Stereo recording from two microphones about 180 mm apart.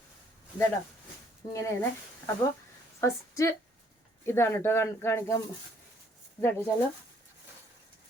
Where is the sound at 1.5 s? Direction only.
15° left (ahead or behind).